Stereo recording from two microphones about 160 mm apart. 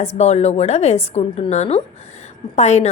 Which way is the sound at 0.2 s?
45° left (ahead or behind).